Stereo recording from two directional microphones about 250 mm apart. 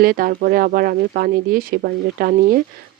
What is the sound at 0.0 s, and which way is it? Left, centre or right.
Speech, right.